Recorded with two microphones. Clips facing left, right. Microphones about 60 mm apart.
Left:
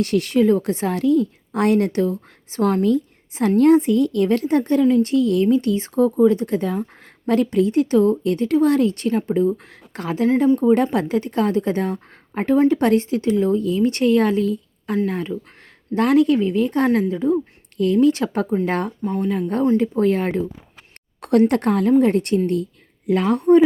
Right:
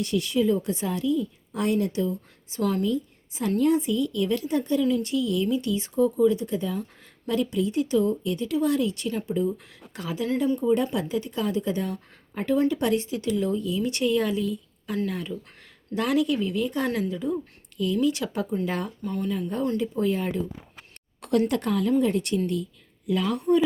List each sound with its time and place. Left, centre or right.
0.0 s a woman's voice: left
10.9 s a woman's voice: left
17.7 s a woman's voice: left
19.0 s speech: left
19.3 s a woman's voice: left